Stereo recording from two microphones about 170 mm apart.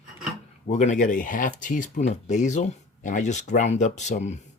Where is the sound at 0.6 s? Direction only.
45° left (ahead or behind).